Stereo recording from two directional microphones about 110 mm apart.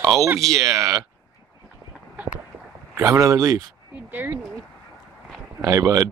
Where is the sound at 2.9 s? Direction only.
30° right (ahead or behind).